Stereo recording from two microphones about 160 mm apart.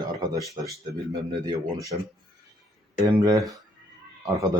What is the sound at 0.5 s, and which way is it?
Speech, 20° right (ahead or behind).